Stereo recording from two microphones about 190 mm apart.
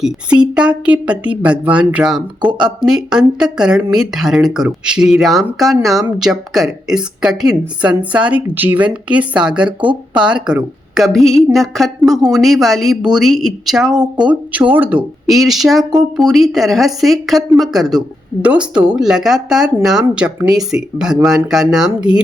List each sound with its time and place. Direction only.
0.0 s a woman's voice: 5° right (ahead or behind)
9.6 s speech: 25° right (ahead or behind)
10.2 s a woman's voice: 5° right (ahead or behind)
15.8 s speech: 20° right (ahead or behind)
16.1 s a woman's voice: centre (ahead or behind)